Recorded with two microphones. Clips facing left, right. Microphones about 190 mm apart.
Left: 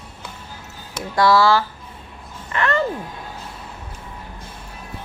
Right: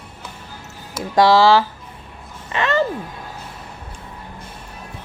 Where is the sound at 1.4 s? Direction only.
15° right (ahead or behind).